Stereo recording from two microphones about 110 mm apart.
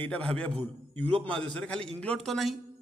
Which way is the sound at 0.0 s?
10° left (ahead or behind).